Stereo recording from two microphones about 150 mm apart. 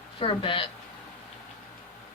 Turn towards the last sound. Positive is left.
turn(degrees=35)  # may be behind; listen again after turning